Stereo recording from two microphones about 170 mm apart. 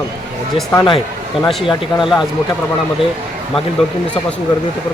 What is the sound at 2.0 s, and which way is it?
Speech, centre (ahead or behind).